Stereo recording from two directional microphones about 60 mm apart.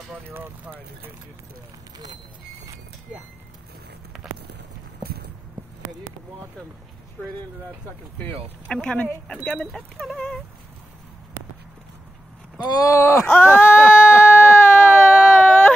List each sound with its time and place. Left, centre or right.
0.3 s speech: right
8.8 s speech: left
9.3 s speech: centre
12.7 s speech: left
13.3 s a sound: left
15.2 s whimper: centre